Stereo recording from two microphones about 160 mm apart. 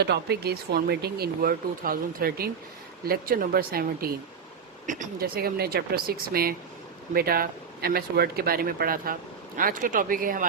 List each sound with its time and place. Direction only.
0.0 s speech: 90° right; by 4.1 s 70° right (ahead or behind)
4.9 s speech: 50° right (ahead or behind)
5.2 s speech: 75° right (ahead or behind)